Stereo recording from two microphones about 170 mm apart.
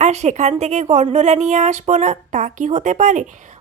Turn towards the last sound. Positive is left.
turn(degrees=-45)  # may be behind; listen again after turning